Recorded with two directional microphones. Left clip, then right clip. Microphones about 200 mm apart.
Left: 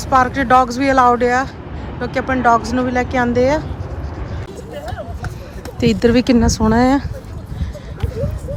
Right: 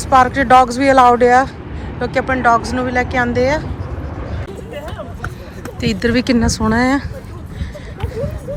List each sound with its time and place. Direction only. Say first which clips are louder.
0.1 s speech: right 3 dB; 15° left (ahead or behind)
5.8 s speech: left 3 dB; 25° left (ahead or behind)